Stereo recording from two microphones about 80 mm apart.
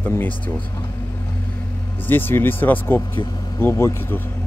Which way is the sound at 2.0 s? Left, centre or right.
Left.